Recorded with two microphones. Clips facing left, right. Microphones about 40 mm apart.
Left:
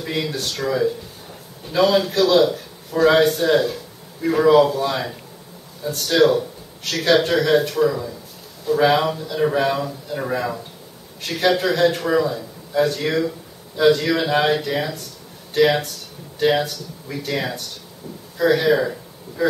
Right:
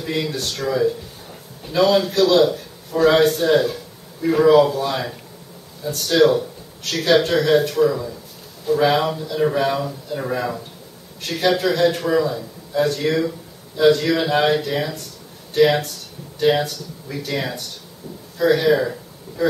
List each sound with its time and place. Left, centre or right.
0.0 s a man's voice: centre